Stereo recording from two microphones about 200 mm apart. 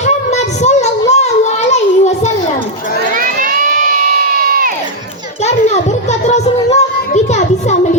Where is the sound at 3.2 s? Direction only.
40° right (ahead or behind).